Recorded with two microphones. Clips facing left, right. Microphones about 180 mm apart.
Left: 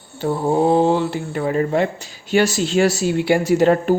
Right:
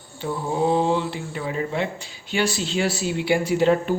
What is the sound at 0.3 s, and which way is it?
Mantra, 65° left (ahead or behind).